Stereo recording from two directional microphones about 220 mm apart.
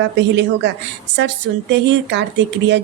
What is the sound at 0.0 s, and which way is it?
Speech, 55° right (ahead or behind).